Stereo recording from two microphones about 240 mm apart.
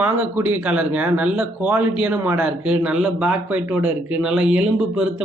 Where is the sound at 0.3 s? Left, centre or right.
Centre.